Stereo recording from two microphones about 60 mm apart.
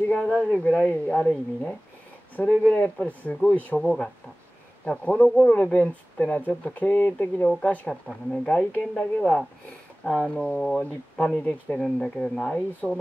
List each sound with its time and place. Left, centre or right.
0.0 s speech: centre
2.3 s speech: centre